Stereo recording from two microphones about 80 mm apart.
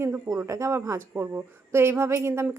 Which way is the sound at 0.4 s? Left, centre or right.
Right.